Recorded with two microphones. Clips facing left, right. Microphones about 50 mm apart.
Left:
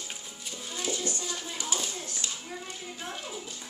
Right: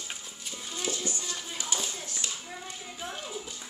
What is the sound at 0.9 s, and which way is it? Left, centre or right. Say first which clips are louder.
Music: left 1 dB; centre.